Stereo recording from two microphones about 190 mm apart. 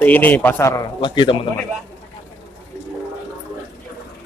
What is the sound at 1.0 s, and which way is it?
Speech, 25° left (ahead or behind).